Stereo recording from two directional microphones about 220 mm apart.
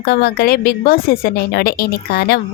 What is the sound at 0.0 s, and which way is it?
A woman's voice, 45° left (ahead or behind).